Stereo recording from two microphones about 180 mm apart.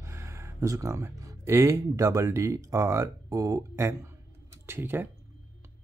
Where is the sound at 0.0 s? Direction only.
15° right (ahead or behind).